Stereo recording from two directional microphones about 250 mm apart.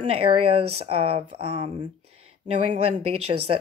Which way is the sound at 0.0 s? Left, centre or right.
Right.